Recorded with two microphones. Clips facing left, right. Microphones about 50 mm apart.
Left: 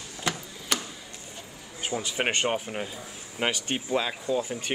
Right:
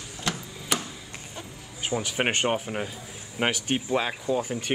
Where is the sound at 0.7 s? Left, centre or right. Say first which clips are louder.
Right 1 dB; centre.